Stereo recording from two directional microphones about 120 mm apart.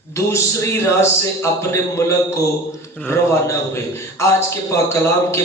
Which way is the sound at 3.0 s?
25° left (ahead or behind).